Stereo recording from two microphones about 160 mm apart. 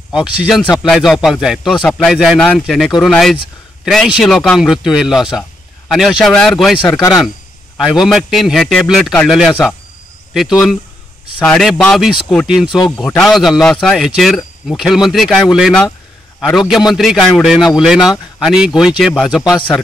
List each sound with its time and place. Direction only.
0.1 s speech: 5° right (ahead or behind)
7.0 s speech: 20° left (ahead or behind)
8.0 s speech: centre (ahead or behind)